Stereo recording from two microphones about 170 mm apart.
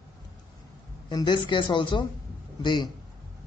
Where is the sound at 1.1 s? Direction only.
25° left (ahead or behind).